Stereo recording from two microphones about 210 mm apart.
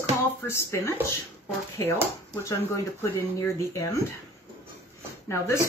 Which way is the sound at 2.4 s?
15° left (ahead or behind).